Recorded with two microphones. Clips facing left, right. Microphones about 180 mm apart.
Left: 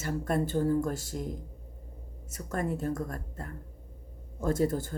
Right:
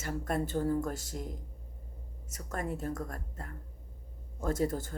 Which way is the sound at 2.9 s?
35° left (ahead or behind).